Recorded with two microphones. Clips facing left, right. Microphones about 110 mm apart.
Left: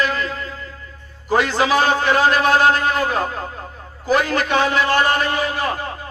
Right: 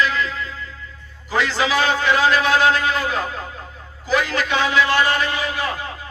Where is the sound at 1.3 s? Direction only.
45° left (ahead or behind).